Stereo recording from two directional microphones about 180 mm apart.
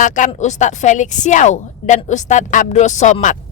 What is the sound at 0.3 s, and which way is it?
A woman's voice, 40° left (ahead or behind).